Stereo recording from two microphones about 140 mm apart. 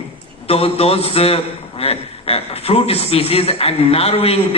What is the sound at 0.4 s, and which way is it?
A man's voice, 45° left (ahead or behind).